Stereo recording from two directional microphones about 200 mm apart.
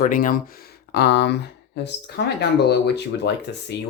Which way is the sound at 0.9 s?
55° left (ahead or behind).